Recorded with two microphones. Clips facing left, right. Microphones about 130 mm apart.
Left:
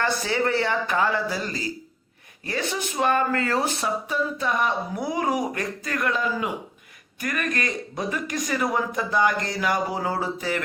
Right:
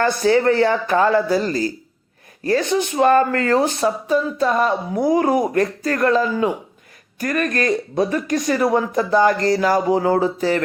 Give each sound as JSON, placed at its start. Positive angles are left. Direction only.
{"t": 0.0, "sound": "speech", "side_deg": -35}